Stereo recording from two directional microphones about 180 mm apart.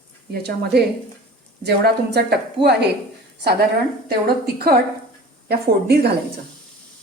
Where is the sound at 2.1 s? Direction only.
65° right (ahead or behind).